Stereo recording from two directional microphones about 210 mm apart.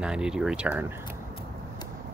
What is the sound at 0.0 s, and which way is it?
Speech, 5° right (ahead or behind).